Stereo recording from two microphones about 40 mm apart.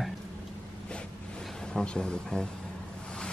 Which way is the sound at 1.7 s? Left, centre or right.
Left.